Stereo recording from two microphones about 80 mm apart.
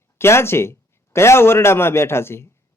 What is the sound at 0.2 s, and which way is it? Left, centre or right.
A man's voice, left.